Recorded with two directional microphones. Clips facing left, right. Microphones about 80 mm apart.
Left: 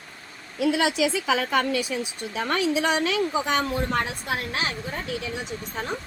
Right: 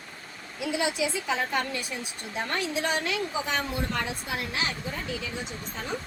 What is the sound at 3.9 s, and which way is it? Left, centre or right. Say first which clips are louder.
Speech: left 5 dB; left.